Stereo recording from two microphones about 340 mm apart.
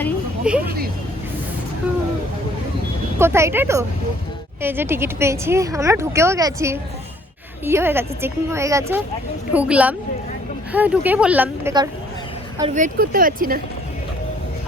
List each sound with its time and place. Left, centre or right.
0.0 s vehicle: centre
0.6 s a woman's voice: right
3.2 s a woman's voice: centre; by 13.6 s right